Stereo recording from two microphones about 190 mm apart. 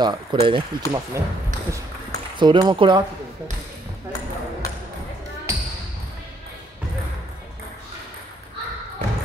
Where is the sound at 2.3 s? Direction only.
25° right (ahead or behind).